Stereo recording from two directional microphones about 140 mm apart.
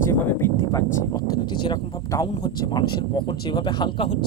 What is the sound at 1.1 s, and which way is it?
Speech, 30° left (ahead or behind).